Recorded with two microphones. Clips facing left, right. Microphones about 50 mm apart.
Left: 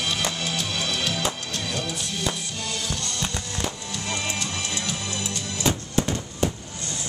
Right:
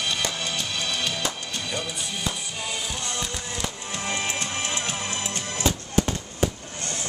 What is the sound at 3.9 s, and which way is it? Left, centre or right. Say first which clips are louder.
Music: right 1 dB; right.